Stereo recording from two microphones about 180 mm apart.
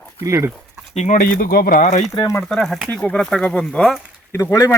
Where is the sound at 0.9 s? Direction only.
45° left (ahead or behind).